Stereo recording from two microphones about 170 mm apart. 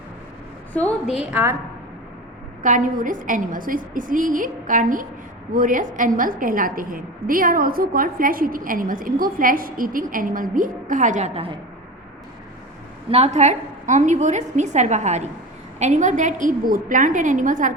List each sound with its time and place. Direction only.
0.7 s a woman's voice: 10° left (ahead or behind)
1.1 s a woman's voice: 5° right (ahead or behind)
2.6 s a woman's voice: 50° right (ahead or behind)
13.1 s a woman's voice: 35° right (ahead or behind)